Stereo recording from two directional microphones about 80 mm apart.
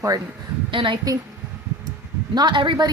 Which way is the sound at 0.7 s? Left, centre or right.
Right.